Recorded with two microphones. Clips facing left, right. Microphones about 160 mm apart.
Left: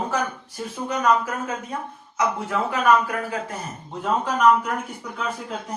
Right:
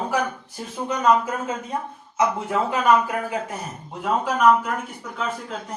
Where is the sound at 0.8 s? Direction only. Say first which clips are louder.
Right 2 dB; 25° right (ahead or behind).